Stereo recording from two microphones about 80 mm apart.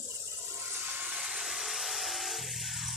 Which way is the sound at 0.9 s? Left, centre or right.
Right.